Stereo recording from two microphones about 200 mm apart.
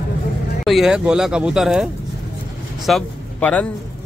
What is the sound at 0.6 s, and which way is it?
Speech, centre (ahead or behind).